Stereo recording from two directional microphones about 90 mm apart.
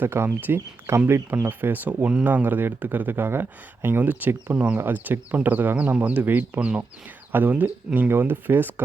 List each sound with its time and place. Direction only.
0.0 s speech: 25° right (ahead or behind)